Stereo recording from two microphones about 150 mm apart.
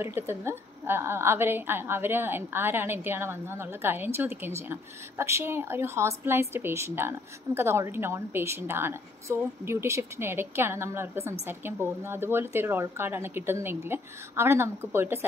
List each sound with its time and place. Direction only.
0.0 s a woman's voice: 15° right (ahead or behind)